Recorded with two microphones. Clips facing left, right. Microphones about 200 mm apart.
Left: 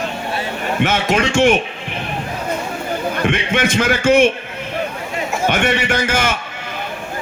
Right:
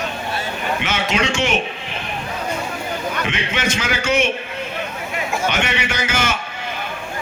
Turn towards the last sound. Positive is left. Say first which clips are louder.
# left 4 dB
turn(degrees=50)  # may be behind; listen again after turning